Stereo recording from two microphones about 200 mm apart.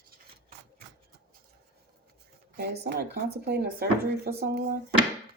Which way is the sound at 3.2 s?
55° right (ahead or behind).